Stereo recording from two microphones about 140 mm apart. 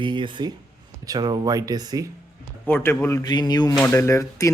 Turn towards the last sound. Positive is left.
turn(degrees=20)  # may be behind; listen again after turning